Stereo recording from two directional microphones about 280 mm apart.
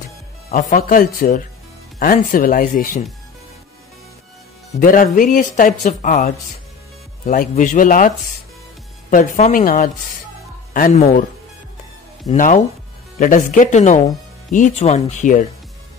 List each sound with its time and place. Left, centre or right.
0.5 s speech: left
4.7 s speech: left
9.1 s speech: left
12.3 s speech: left